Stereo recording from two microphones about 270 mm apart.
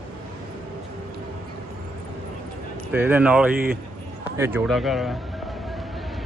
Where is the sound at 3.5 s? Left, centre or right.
Right.